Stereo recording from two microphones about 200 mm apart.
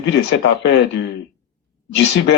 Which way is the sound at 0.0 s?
60° left (ahead or behind).